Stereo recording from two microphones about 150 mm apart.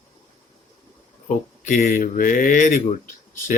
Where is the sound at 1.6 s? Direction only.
55° left (ahead or behind).